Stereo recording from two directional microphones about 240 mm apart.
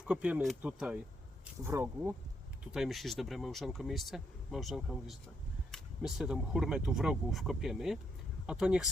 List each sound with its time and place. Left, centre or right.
0.0 s speech: centre